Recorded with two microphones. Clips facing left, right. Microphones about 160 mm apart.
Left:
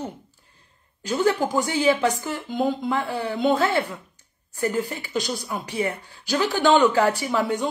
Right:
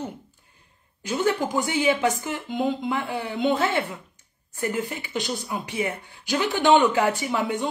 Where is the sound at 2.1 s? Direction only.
40° left (ahead or behind).